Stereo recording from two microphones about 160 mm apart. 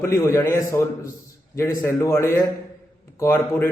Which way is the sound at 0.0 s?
15° left (ahead or behind).